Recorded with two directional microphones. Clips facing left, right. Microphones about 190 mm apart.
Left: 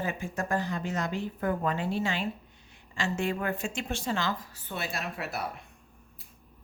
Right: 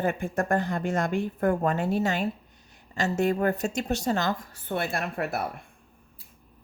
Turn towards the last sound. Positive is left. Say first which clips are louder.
# right 5 dB
turn(degrees=-55)  # may be behind; listen again after turning